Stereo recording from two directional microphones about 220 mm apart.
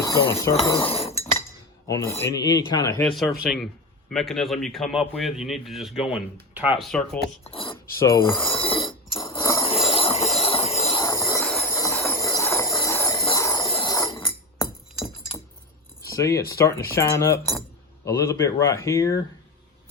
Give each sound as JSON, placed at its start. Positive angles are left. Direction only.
{"t": 0.0, "sound": "speech", "side_deg": 15}
{"t": 0.5, "sound": "chink", "side_deg": 20}
{"t": 2.2, "sound": "speech", "side_deg": 15}
{"t": 3.4, "sound": "a man's voice", "side_deg": 0}
{"t": 7.4, "sound": "filing", "side_deg": 25}
{"t": 7.9, "sound": "speech", "side_deg": 15}
{"t": 8.5, "sound": "a sound", "side_deg": 25}
{"t": 9.8, "sound": "train", "side_deg": 25}
{"t": 11.0, "sound": "train", "side_deg": 15}
{"t": 11.4, "sound": "a sound", "side_deg": 0}
{"t": 11.7, "sound": "a sound", "side_deg": 15}
{"t": 13.2, "sound": "jingle bell", "side_deg": 15}
{"t": 13.7, "sound": "a sound", "side_deg": 20}
{"t": 16.0, "sound": "speech", "side_deg": 15}